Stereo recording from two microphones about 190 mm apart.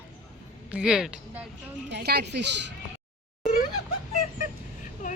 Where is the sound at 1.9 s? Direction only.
60° right (ahead or behind).